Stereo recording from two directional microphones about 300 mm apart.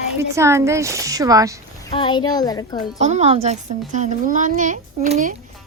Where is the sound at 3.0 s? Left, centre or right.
Right.